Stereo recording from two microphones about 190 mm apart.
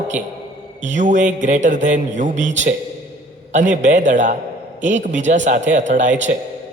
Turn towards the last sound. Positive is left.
turn(degrees=-40)  # may be behind; listen again after turning